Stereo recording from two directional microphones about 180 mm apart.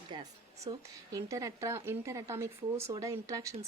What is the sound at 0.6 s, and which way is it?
A woman's voice, 20° right (ahead or behind).